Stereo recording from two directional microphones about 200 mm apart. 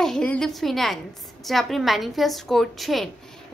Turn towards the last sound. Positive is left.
turn(degrees=0)  # may be behind; listen again after turning